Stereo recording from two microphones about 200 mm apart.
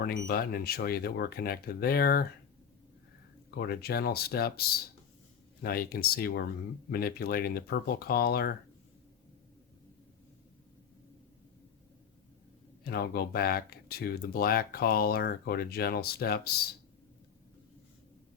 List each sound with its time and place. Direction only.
0.0 s speech: 50° left (ahead or behind)
3.5 s speech: 50° left (ahead or behind)
5.6 s speech: 45° left (ahead or behind)
12.8 s speech: 50° left (ahead or behind)